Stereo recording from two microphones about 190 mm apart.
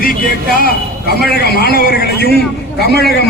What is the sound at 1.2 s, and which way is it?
A man's voice, 55° left (ahead or behind).